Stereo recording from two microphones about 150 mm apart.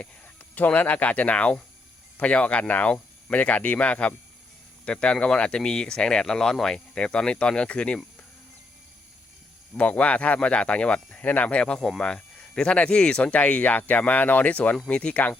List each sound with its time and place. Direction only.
0.5 s speech: 10° left (ahead or behind)
9.7 s speech: 10° left (ahead or behind)